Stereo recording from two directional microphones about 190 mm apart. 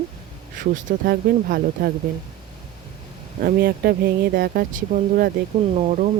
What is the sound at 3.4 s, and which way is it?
Speech, 50° right (ahead or behind).